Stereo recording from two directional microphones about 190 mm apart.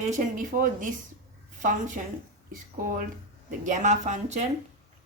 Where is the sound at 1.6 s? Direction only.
45° right (ahead or behind).